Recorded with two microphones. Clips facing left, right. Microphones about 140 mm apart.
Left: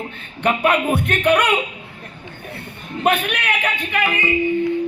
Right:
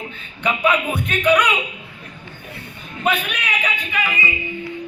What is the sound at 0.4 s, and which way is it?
A man's voice, 55° left (ahead or behind).